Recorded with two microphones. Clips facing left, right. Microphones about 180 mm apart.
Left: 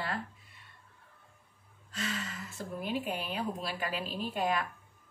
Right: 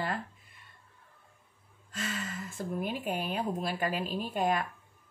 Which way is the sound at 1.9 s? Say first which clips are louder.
Right 1 dB; 45° right (ahead or behind).